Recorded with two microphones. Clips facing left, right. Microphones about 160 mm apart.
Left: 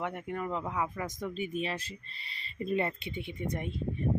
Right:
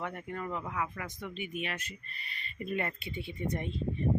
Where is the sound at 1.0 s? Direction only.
45° left (ahead or behind).